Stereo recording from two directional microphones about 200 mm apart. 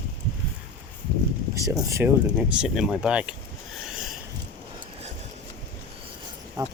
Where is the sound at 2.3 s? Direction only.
5° right (ahead or behind).